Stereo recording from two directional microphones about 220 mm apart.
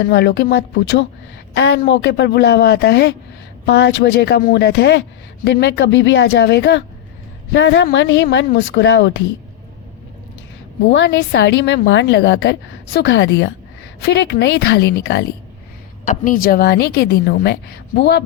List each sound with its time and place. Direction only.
0.0 s a woman's voice: 50° left (ahead or behind)
10.8 s a woman's voice: 55° left (ahead or behind)
16.0 s a woman's voice: 40° left (ahead or behind)